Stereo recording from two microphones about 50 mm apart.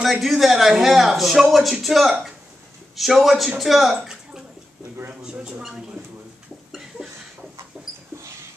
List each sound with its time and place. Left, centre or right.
0.0 s speech: centre
4.0 s bathtub: centre
6.0 s a sound: right
7.7 s dog: centre